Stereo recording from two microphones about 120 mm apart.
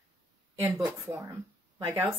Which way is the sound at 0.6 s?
20° right (ahead or behind).